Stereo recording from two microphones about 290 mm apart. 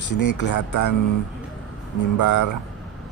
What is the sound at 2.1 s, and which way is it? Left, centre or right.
Speech, left.